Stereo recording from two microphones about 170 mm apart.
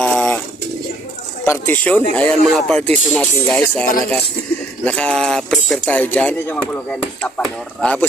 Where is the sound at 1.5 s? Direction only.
10° left (ahead or behind).